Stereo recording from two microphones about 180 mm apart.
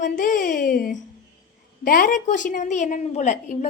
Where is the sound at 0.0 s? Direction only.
45° left (ahead or behind).